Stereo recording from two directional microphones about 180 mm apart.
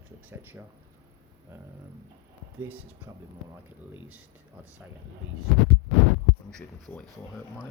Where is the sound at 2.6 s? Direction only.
10° right (ahead or behind).